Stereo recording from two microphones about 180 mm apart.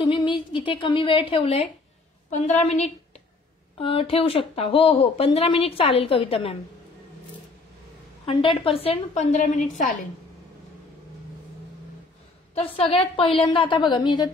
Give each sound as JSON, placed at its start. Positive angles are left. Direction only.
{"t": 0.0, "sound": "a woman's voice", "side_deg": 25}
{"t": 8.3, "sound": "speech", "side_deg": 30}
{"t": 12.5, "sound": "a woman's voice", "side_deg": 30}